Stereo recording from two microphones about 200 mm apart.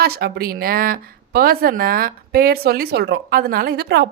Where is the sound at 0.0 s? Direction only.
50° right (ahead or behind).